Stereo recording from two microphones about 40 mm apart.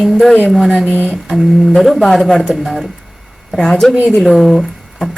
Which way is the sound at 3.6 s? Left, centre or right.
Centre.